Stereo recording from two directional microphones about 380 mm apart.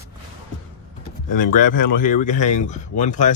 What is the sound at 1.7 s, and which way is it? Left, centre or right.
Speech, left.